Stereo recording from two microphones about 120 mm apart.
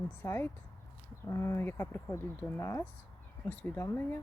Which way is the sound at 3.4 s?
15° left (ahead or behind).